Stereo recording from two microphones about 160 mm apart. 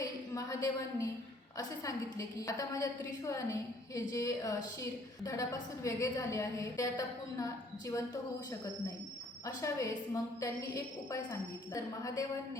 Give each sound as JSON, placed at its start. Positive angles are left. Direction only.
{"t": 0.0, "sound": "a woman's voice", "side_deg": 20}
{"t": 9.6, "sound": "a woman's voice", "side_deg": 20}